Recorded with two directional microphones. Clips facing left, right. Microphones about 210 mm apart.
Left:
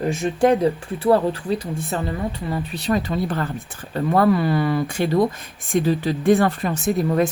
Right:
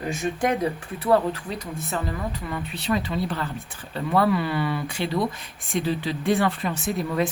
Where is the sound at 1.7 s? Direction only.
30° left (ahead or behind).